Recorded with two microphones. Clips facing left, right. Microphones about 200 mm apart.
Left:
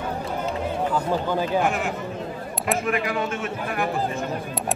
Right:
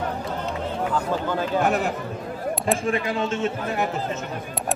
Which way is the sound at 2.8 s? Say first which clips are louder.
Right 1 dB; 25° right (ahead or behind).